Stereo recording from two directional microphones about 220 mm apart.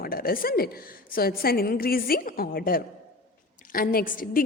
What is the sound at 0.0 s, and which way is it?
A woman's voice, 40° left (ahead or behind).